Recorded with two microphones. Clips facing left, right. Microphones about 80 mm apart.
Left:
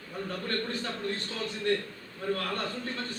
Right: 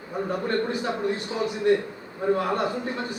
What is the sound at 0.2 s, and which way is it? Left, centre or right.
A man's voice, centre.